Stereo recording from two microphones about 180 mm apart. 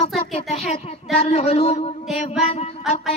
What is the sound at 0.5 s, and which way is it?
Speech, 35° left (ahead or behind).